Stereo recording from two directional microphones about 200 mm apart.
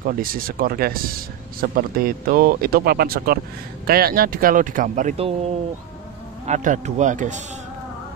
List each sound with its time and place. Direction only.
0.0 s speech: 45° right (ahead or behind)
6.4 s speech: 40° right (ahead or behind)